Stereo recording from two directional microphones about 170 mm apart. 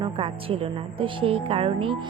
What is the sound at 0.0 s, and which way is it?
A woman's voice, 35° right (ahead or behind).